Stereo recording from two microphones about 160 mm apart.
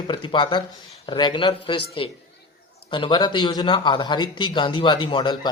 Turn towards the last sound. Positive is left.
turn(degrees=30)  # may be behind; listen again after turning